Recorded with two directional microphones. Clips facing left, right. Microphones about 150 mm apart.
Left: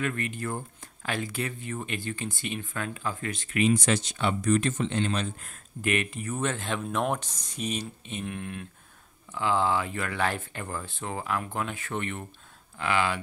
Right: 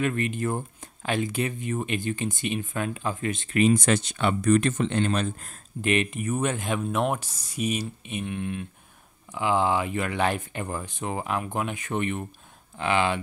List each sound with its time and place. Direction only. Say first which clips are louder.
0.0 s speech: right 5 dB; 20° right (ahead or behind)
3.5 s speech: right 3 dB; 50° right (ahead or behind)
5.9 s speech: right 4 dB; 20° right (ahead or behind)
8.3 s speech: right 5 dB; centre (ahead or behind)
9.3 s speech: right 2 dB; 15° right (ahead or behind)